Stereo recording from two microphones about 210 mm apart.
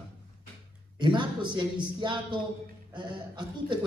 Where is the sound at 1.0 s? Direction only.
20° right (ahead or behind).